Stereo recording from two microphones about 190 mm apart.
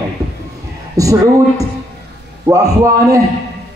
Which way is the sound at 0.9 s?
15° right (ahead or behind).